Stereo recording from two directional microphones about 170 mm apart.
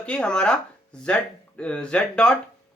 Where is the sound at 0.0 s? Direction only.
5° left (ahead or behind).